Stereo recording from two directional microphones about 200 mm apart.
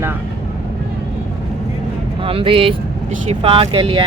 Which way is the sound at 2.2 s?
25° right (ahead or behind).